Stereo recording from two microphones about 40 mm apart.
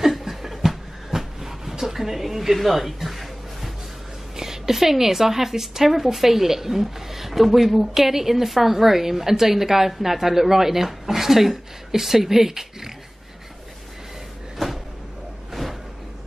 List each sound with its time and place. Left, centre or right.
0.0 s a sound: centre
4.4 s a woman's voice: centre
14.6 s cupboard open or close: centre